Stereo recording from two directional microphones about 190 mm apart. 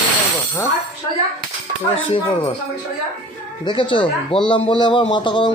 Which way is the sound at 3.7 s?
25° left (ahead or behind).